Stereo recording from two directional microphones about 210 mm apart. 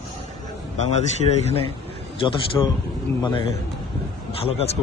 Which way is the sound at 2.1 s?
25° left (ahead or behind).